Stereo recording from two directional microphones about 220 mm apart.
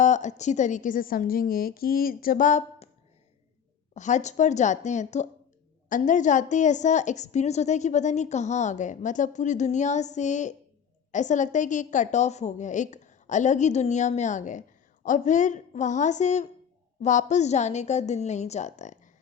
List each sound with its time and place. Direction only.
0.0 s a woman's voice: 35° left (ahead or behind)
3.9 s a woman's voice: 35° left (ahead or behind)